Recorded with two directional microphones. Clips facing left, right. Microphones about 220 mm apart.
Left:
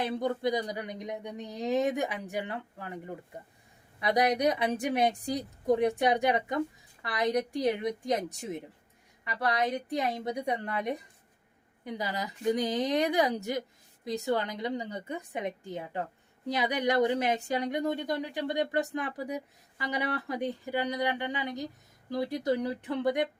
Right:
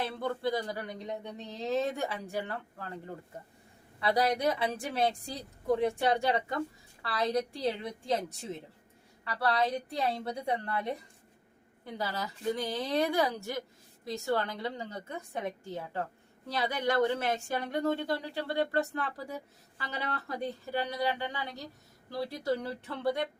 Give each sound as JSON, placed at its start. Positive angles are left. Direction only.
{"t": 0.0, "sound": "a woman's voice", "side_deg": 15}